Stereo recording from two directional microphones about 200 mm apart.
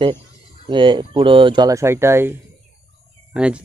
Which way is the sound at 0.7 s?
25° right (ahead or behind).